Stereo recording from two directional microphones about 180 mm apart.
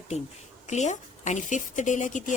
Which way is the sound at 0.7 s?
40° left (ahead or behind).